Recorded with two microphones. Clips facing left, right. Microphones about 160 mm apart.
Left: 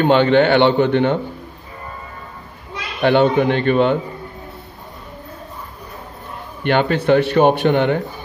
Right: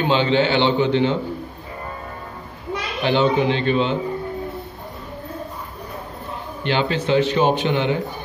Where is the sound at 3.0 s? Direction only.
55° left (ahead or behind).